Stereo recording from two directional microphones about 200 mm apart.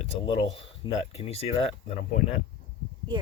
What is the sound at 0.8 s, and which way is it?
Speech, 25° left (ahead or behind).